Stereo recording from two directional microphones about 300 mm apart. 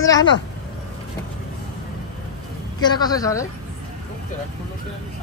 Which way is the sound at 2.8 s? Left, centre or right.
Centre.